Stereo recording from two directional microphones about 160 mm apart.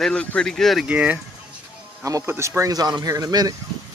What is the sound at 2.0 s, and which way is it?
Speech, 20° right (ahead or behind).